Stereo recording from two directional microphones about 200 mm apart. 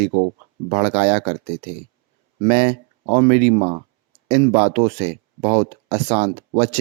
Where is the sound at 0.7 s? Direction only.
35° right (ahead or behind).